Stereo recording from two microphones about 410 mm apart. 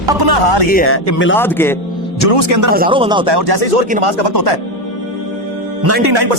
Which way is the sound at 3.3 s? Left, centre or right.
Right.